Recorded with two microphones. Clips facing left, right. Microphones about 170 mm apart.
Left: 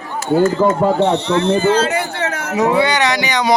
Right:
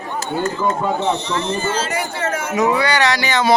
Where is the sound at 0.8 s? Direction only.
60° left (ahead or behind).